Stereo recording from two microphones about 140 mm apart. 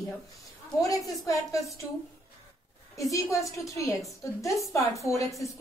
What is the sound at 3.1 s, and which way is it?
A woman's voice, 20° left (ahead or behind).